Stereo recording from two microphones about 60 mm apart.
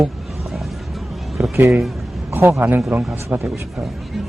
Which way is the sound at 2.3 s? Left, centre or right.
Right.